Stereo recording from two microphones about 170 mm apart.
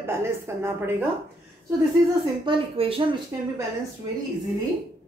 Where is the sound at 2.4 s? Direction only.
30° right (ahead or behind).